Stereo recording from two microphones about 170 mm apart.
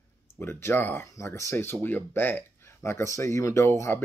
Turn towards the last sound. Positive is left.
turn(degrees=15)  # may be behind; listen again after turning